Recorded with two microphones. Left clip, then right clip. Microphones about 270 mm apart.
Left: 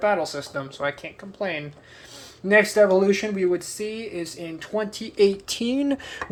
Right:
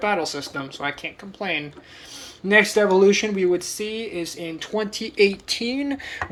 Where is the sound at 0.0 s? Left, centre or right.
Left.